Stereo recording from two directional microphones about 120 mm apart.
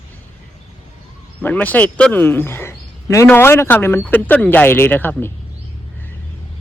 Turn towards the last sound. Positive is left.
turn(degrees=15)  # may be behind; listen again after turning